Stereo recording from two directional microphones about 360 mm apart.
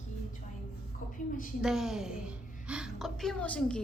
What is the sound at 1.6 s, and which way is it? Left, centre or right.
A woman's voice, centre.